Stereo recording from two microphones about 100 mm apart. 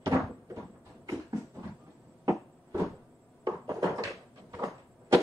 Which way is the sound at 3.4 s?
35° right (ahead or behind).